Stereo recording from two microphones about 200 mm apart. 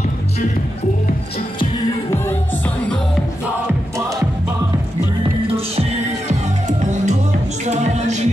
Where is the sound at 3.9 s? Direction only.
15° right (ahead or behind).